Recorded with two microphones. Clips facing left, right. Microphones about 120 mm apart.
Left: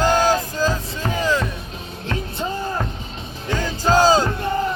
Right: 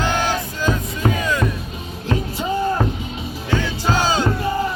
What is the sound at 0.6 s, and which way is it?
Music, 35° left (ahead or behind).